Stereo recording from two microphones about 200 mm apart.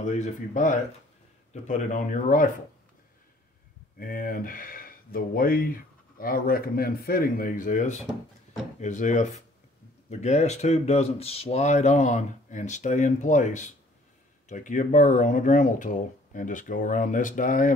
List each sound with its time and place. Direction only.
0.0 s speech: 40° left (ahead or behind)
4.0 s speech: 45° left (ahead or behind)